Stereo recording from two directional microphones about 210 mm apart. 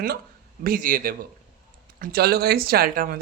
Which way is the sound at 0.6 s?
40° right (ahead or behind).